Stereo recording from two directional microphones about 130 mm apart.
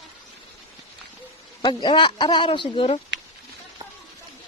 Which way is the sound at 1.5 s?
35° left (ahead or behind).